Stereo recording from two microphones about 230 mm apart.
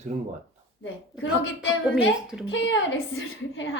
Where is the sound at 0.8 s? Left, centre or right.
Left.